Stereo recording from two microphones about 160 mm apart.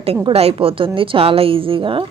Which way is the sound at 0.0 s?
40° right (ahead or behind).